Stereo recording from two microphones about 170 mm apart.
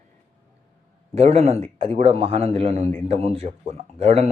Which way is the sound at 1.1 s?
40° right (ahead or behind).